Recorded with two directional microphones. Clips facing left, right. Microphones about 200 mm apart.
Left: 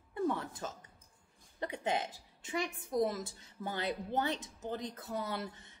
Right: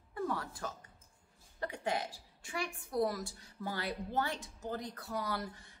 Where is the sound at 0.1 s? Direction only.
20° left (ahead or behind).